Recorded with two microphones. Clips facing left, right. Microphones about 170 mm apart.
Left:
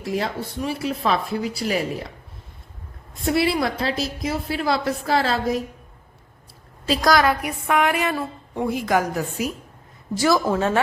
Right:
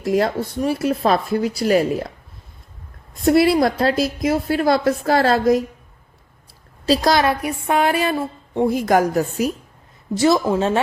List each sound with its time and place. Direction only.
0.0 s speech: 45° right (ahead or behind)
3.2 s speech: 40° right (ahead or behind)
6.8 s a woman's voice: 30° right (ahead or behind)
8.7 s speech: 40° right (ahead or behind)
10.2 s a woman's voice: 25° right (ahead or behind)